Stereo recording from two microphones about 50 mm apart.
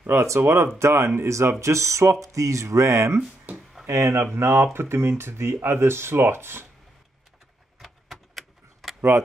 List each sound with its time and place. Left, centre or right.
0.0 s speech: right
0.4 s speech: right
3.2 s a sound: right
3.8 s speech: right
7.8 s keys jangling: centre